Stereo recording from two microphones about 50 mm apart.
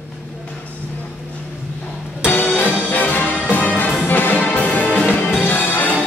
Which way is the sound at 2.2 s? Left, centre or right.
Left.